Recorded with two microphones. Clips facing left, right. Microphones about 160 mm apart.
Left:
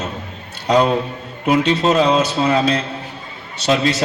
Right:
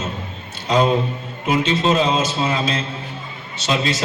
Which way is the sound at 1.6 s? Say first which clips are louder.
Left 2 dB; 40° left (ahead or behind).